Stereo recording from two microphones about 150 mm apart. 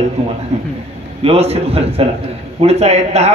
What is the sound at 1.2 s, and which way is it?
Music, 45° right (ahead or behind).